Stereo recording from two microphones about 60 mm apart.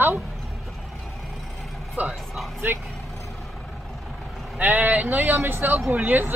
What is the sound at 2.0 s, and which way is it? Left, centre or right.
Speech, right.